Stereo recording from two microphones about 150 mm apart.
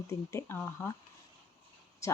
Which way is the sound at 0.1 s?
15° left (ahead or behind).